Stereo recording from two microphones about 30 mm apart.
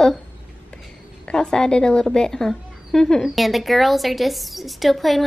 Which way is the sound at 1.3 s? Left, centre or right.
Left.